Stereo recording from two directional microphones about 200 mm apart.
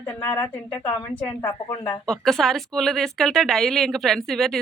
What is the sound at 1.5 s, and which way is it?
Speech, 25° left (ahead or behind).